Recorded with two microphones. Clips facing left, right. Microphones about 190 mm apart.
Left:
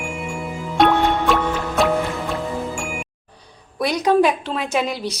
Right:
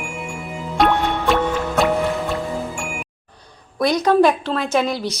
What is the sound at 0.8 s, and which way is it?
Music, centre (ahead or behind).